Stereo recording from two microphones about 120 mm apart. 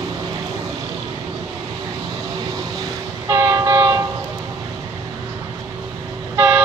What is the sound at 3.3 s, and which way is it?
Train, 25° right (ahead or behind).